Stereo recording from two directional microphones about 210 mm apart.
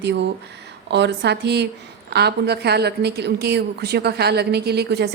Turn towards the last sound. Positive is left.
turn(degrees=-50)  # may be behind; listen again after turning